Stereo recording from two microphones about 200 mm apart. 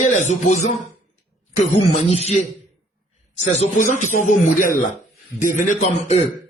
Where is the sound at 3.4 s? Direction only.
40° left (ahead or behind).